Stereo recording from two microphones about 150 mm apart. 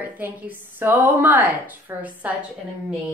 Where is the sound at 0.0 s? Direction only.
10° right (ahead or behind).